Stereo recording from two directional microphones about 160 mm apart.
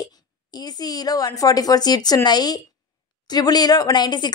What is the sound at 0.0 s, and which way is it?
A woman's voice, 25° left (ahead or behind).